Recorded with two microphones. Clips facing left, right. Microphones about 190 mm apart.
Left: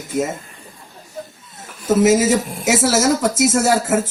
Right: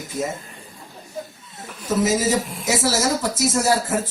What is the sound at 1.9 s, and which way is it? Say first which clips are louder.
Speech: left 6 dB; 75° left (ahead or behind).